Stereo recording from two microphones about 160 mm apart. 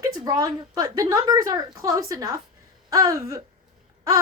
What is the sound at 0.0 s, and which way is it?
A woman's voice, 25° right (ahead or behind).